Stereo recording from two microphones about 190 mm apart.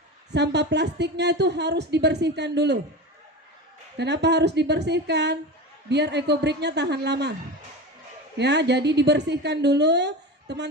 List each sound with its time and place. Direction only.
0.3 s a woman's voice: 65° right (ahead or behind)
3.9 s a woman's voice: 65° right (ahead or behind)
8.4 s a woman's voice: 65° right (ahead or behind)